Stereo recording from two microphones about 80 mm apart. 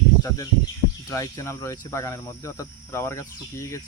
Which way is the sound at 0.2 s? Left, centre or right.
Left.